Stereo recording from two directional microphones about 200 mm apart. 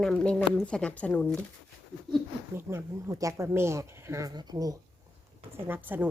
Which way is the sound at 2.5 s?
10° right (ahead or behind).